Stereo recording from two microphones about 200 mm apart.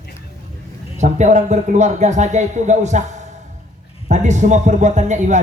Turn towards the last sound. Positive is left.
turn(degrees=-35)  # may be behind; listen again after turning